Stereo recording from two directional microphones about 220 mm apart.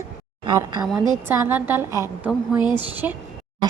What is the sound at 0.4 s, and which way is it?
A woman's voice, 20° right (ahead or behind).